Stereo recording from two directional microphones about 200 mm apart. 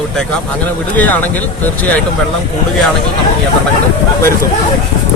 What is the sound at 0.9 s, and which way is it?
Speech, 10° left (ahead or behind).